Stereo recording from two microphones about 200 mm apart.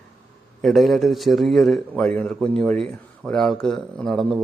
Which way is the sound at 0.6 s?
Centre (ahead or behind).